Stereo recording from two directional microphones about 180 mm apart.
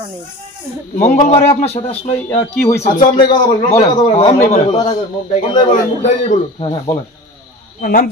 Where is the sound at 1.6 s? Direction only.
35° left (ahead or behind).